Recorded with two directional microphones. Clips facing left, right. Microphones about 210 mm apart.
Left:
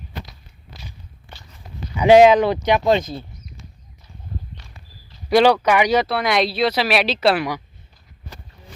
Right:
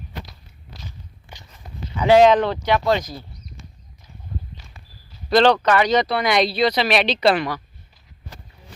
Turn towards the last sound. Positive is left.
turn(degrees=10)  # may be behind; listen again after turning